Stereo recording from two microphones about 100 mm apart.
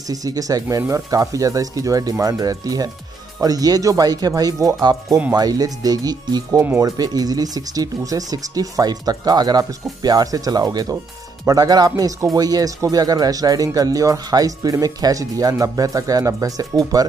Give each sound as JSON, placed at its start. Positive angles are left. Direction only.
{"t": 0.1, "sound": "speech", "side_deg": -35}